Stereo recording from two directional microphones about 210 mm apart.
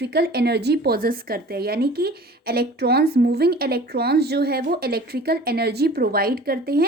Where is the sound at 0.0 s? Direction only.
50° right (ahead or behind).